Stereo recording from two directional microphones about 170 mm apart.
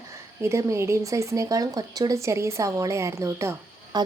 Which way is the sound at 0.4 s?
15° right (ahead or behind).